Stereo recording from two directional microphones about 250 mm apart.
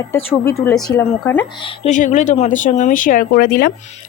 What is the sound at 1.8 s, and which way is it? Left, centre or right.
Speech, left.